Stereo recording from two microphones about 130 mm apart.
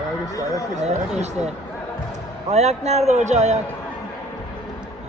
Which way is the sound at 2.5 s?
55° right (ahead or behind).